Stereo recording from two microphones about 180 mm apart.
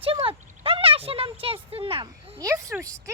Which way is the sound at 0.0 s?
30° right (ahead or behind).